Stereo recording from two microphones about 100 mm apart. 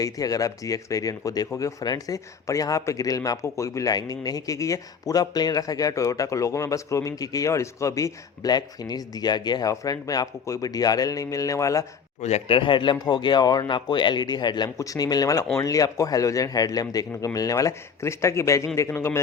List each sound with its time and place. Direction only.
0.0 s a man's voice: 35° left (ahead or behind)
12.2 s speech: 80° left; by 14.7 s 45° left (ahead or behind)
14.8 s a man's voice: 35° left (ahead or behind)